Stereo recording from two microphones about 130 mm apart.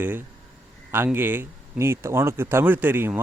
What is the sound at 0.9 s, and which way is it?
Speech, 15° right (ahead or behind).